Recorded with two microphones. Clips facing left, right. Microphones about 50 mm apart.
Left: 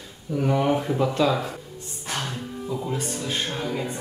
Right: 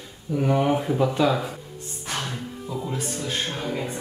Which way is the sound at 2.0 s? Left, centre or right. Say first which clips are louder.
Even; centre.